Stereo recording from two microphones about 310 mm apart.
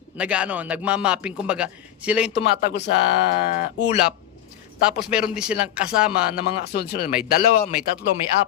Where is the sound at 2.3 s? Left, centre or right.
Left.